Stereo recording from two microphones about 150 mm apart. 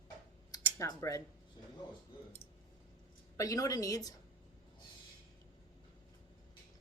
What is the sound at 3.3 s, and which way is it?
Speech, 20° left (ahead or behind).